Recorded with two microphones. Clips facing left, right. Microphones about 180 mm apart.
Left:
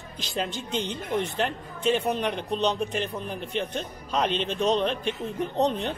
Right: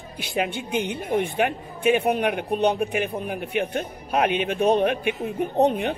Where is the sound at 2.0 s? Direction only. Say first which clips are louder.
Right 4 dB; 60° right (ahead or behind).